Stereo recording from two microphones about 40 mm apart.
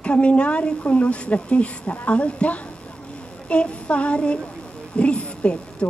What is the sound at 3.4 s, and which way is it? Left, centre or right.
Child singing, left.